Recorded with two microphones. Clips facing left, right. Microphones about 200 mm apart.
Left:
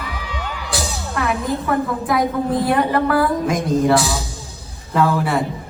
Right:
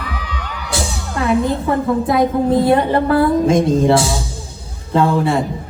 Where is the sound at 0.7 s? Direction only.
25° right (ahead or behind).